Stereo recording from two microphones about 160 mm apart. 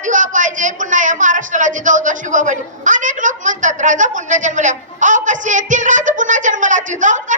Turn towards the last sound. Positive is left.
turn(degrees=-50)  # may be behind; listen again after turning